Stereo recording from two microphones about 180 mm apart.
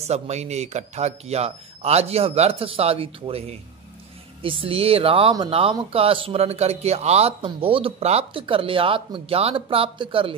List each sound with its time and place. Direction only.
0.0 s speech: 35° right (ahead or behind)